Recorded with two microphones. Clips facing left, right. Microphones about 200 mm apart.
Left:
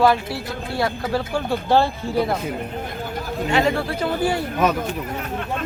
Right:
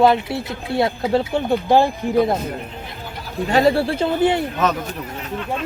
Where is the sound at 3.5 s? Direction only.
35° right (ahead or behind).